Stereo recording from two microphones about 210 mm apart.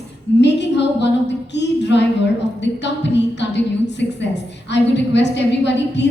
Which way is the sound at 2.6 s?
55° left (ahead or behind).